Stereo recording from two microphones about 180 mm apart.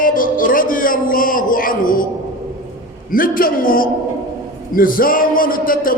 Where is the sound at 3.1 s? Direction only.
50° left (ahead or behind).